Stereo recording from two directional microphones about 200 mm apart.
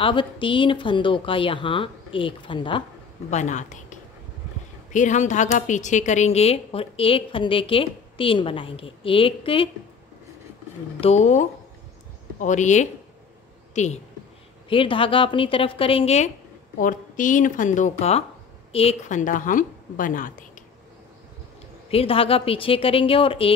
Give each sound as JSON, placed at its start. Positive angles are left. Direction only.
{"t": 0.0, "sound": "a woman's voice", "side_deg": 25}
{"t": 3.3, "sound": "a woman's voice", "side_deg": 35}
{"t": 11.0, "sound": "a woman's voice", "side_deg": 35}
{"t": 16.7, "sound": "a woman's voice", "side_deg": 40}
{"t": 21.9, "sound": "a woman's voice", "side_deg": 30}